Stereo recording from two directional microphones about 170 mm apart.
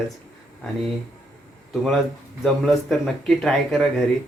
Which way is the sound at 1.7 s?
Centre (ahead or behind).